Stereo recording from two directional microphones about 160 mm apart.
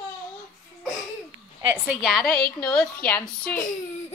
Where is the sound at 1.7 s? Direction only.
5° right (ahead or behind); by 3.6 s 10° left (ahead or behind).